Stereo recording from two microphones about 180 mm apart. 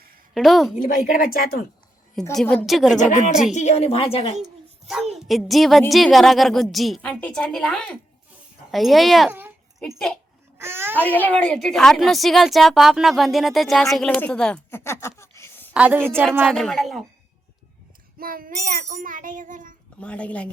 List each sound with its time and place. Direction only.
0.3 s a woman's voice: centre (ahead or behind)
0.8 s a woman's voice: 50° left (ahead or behind)
2.3 s a woman's voice: 5° left (ahead or behind)
3.0 s a woman's voice: 45° left (ahead or behind)
4.4 s a sound: centre (ahead or behind)
5.2 s a woman's voice: centre (ahead or behind)
10.6 s a sound: 15° right (ahead or behind)
10.9 s a woman's voice: 10° left (ahead or behind)
15.7 s a woman's voice: 10° right (ahead or behind)
16.4 s a woman's voice: centre (ahead or behind)
18.2 s child singing: 50° right (ahead or behind)
20.0 s speech: 5° left (ahead or behind)